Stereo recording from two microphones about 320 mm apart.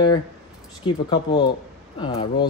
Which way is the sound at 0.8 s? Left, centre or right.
Centre.